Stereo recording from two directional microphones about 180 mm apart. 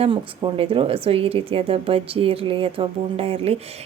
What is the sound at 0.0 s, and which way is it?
A woman's voice, 30° right (ahead or behind).